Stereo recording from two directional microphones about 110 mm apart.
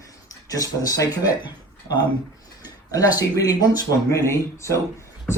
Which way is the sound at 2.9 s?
30° left (ahead or behind).